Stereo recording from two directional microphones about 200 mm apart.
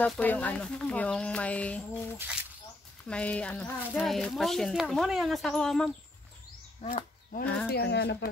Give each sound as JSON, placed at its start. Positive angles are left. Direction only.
{"t": 0.0, "sound": "speech", "side_deg": 10}
{"t": 3.1, "sound": "speech", "side_deg": 5}
{"t": 6.8, "sound": "speech", "side_deg": 30}
{"t": 7.4, "sound": "speech", "side_deg": 5}
{"t": 7.7, "sound": "speech", "side_deg": 55}